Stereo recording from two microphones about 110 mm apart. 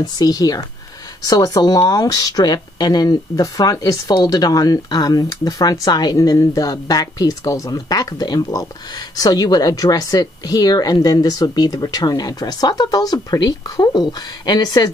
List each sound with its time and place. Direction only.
0.0 s speech: 35° left (ahead or behind)